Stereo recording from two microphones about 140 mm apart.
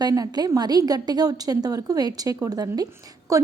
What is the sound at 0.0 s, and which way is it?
A woman's voice, 25° right (ahead or behind).